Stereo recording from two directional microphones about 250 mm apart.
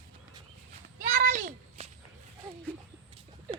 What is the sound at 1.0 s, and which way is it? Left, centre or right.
Speech, right.